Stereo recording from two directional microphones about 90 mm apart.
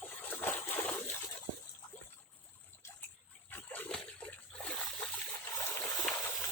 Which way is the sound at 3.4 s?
20° left (ahead or behind).